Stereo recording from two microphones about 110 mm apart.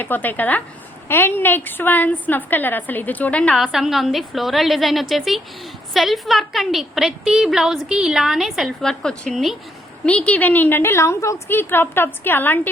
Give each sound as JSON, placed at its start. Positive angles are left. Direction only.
{"t": 0.0, "sound": "a woman's voice", "side_deg": 15}
{"t": 3.7, "sound": "a woman's voice", "side_deg": -5}